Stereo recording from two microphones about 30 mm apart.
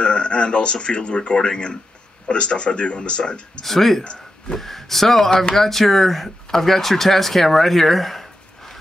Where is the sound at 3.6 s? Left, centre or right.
Centre.